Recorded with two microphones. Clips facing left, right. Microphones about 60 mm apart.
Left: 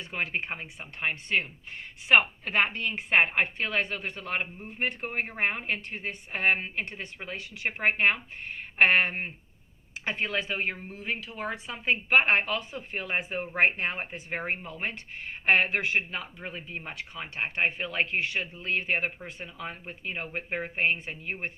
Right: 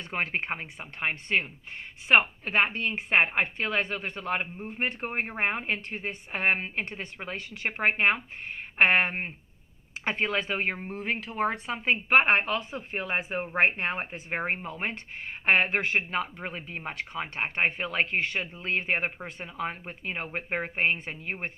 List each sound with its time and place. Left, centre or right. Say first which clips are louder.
0.0 s speech: right 1 dB; right
2.0 s a woman's voice: even; right
9.0 s a woman's voice: right 1 dB; right
10.0 s speech: right 2 dB; right